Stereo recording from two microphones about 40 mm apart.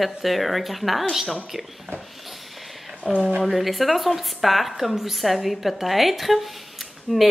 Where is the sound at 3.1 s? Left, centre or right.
Centre.